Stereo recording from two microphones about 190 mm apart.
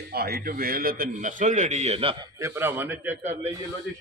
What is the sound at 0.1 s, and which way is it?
A man's voice, 55° right (ahead or behind).